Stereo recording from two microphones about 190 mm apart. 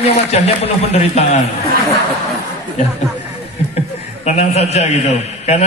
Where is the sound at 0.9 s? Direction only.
35° left (ahead or behind).